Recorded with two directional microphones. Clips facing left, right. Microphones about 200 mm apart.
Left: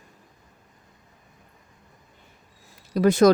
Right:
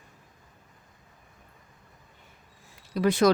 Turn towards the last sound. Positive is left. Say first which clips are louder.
# left 5 dB
turn(degrees=45)  # may be behind; listen again after turning